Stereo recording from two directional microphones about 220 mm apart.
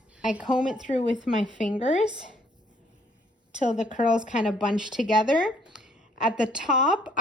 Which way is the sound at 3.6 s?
35° left (ahead or behind).